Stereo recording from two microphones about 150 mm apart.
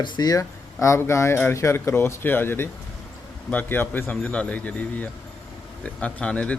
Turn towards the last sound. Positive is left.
turn(degrees=10)  # may be behind; listen again after turning